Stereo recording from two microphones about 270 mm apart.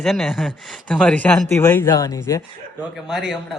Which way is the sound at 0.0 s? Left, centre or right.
Centre.